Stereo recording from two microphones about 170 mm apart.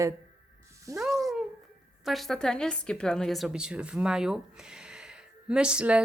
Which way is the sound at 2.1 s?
Centre (ahead or behind).